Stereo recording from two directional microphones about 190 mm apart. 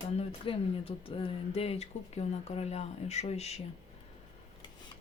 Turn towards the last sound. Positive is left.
turn(degrees=35)  # may be behind; listen again after turning